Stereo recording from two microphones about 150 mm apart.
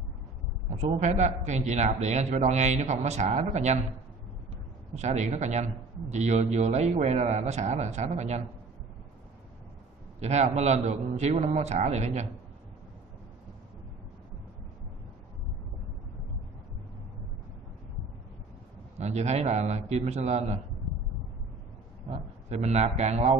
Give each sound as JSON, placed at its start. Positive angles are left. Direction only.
{"t": 0.7, "sound": "a man's voice", "side_deg": -50}
{"t": 4.9, "sound": "a man's voice", "side_deg": -50}
{"t": 10.2, "sound": "a man's voice", "side_deg": -50}
{"t": 18.9, "sound": "a man's voice", "side_deg": -50}
{"t": 22.5, "sound": "a man's voice", "side_deg": -45}